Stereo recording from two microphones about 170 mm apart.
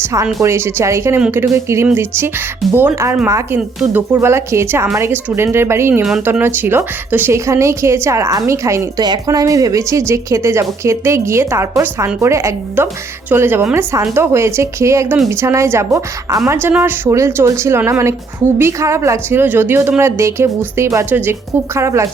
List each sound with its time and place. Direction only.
0.0 s a woman's voice: 20° right (ahead or behind)